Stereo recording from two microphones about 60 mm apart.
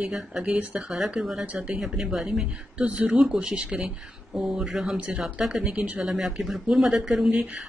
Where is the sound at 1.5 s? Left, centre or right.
Centre.